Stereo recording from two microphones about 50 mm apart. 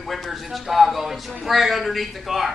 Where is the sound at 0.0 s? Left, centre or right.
Centre.